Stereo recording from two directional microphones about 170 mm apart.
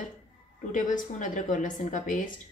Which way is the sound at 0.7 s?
50° left (ahead or behind).